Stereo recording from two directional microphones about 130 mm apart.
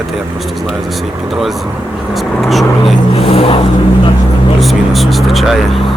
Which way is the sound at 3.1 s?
50° left (ahead or behind).